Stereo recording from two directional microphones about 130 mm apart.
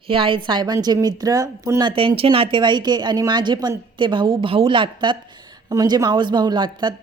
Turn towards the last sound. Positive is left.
turn(degrees=-35)  # may be behind; listen again after turning